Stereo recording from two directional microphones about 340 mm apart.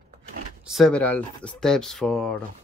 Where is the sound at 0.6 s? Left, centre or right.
Centre.